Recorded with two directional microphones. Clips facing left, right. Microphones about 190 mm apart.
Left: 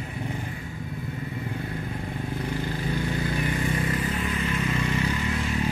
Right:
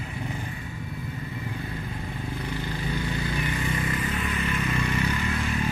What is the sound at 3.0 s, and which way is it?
Vehicle, 40° left (ahead or behind).